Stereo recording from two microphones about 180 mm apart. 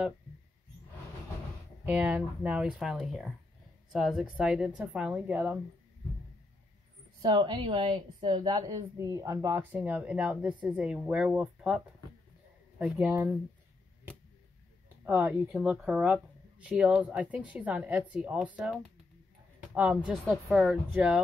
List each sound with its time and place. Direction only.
1.9 s speech: 5° right (ahead or behind)
7.2 s speech: 25° right (ahead or behind)
15.0 s speech: 10° right (ahead or behind)